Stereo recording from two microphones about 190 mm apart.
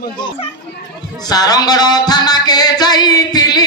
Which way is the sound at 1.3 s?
20° left (ahead or behind).